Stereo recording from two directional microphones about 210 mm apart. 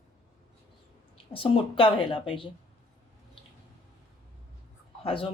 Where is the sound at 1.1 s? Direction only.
25° left (ahead or behind).